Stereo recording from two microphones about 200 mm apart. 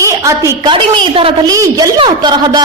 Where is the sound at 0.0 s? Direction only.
15° right (ahead or behind).